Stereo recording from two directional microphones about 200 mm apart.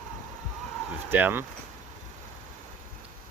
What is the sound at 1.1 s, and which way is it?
Speech, 10° right (ahead or behind).